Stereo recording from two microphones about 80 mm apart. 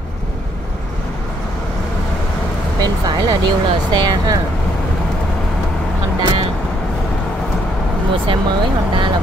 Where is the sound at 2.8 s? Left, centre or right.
Right.